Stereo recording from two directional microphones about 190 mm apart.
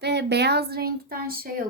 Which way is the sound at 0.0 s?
60° right (ahead or behind).